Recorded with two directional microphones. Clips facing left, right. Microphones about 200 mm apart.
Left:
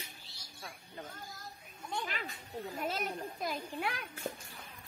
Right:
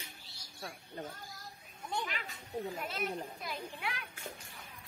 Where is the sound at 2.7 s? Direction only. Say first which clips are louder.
Left 1 dB; 40° left (ahead or behind).